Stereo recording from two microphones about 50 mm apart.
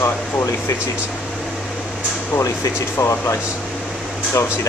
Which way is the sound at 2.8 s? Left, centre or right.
Left.